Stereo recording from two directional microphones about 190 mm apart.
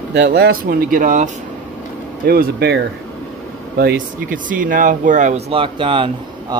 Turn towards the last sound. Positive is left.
turn(degrees=-25)  # may be behind; listen again after turning